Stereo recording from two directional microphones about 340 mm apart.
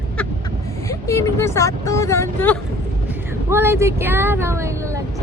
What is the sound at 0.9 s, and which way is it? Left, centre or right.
Speech, centre.